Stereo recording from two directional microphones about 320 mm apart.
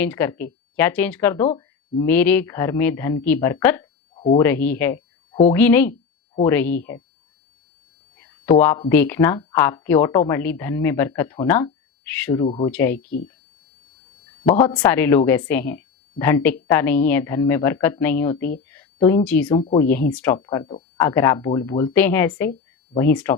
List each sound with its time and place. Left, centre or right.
0.0 s speech: centre
4.1 s a sound: centre
4.4 s speech: centre
5.3 s a woman's voice: centre
5.5 s speech: centre
8.2 s a sound: centre
8.9 s speech: centre
14.6 s speech: centre
18.7 s a sound: centre
19.5 s speech: centre
19.8 s speech: centre